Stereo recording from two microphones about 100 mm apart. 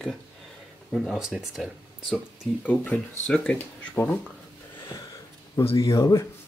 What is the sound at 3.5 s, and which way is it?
Speech, 20° left (ahead or behind).